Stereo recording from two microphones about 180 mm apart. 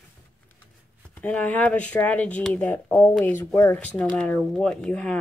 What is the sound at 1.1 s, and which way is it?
Speech, 10° left (ahead or behind).